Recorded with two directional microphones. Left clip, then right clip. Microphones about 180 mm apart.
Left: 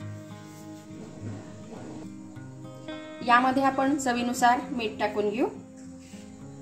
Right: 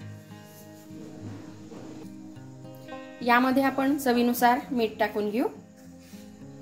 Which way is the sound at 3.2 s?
35° right (ahead or behind).